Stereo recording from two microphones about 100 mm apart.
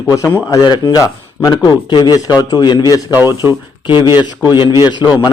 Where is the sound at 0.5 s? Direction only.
45° left (ahead or behind).